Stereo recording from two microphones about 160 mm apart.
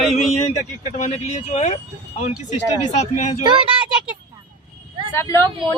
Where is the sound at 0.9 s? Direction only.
45° left (ahead or behind).